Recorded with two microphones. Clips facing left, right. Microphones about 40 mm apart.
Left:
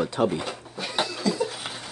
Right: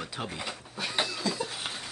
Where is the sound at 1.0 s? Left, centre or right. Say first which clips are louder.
Left 4 dB; left.